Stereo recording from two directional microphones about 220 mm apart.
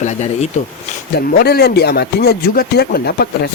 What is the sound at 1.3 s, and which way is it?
Speech, 45° left (ahead or behind).